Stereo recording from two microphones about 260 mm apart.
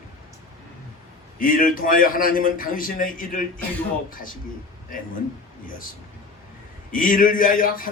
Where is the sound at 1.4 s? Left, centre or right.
Left.